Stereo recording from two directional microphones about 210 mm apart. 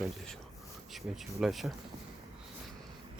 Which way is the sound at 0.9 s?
Centre (ahead or behind).